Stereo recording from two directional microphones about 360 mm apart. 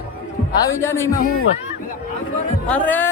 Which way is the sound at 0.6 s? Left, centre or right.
Centre.